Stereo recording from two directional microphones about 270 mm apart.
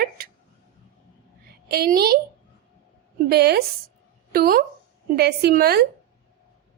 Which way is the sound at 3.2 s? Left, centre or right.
Right.